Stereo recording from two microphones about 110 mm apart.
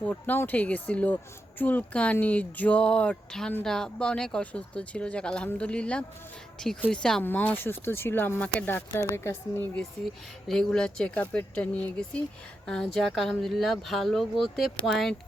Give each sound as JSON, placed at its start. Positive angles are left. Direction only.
{"t": 0.0, "sound": "speech", "side_deg": 15}
{"t": 7.3, "sound": "speech", "side_deg": 15}
{"t": 10.5, "sound": "speech", "side_deg": 5}